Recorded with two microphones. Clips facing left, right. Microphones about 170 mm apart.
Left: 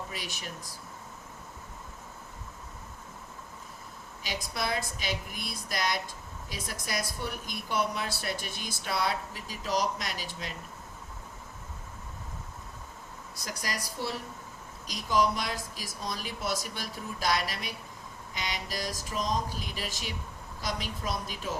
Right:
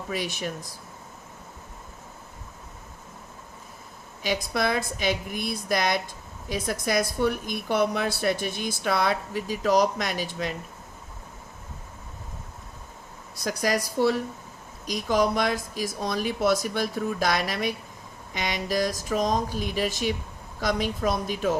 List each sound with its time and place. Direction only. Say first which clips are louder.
0.1 s speech: right 10 dB; 70° right (ahead or behind)
4.3 s speech: right 8 dB; 75° right (ahead or behind)
13.4 s speech: right 12 dB; 70° right (ahead or behind)